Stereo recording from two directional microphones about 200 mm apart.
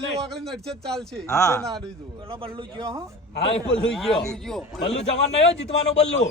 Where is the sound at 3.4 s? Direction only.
30° left (ahead or behind).